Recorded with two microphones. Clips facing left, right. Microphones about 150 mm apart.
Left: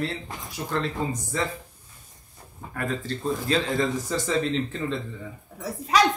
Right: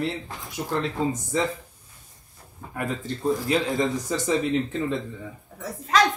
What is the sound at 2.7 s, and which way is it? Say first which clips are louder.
Speech: even; 20° right (ahead or behind).